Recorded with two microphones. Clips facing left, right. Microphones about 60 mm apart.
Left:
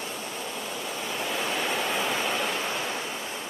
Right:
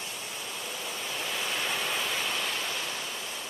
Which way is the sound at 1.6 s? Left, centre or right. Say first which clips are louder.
Left 4 dB; centre.